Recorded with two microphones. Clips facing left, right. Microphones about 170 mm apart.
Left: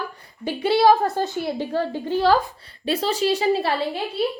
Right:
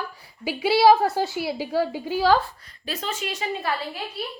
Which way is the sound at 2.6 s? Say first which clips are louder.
Left 9 dB; 30° left (ahead or behind).